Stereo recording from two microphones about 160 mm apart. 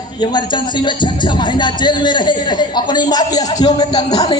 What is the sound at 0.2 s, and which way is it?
A man's voice, 30° left (ahead or behind).